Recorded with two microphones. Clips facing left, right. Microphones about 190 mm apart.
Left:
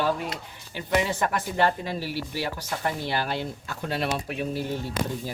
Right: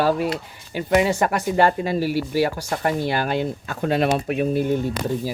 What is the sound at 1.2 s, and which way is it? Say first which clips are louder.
Speech: right 5 dB; 80° right.